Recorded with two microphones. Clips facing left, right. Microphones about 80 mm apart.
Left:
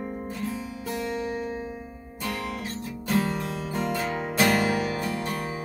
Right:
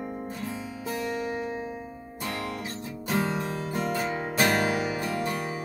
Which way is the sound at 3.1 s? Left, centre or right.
Right.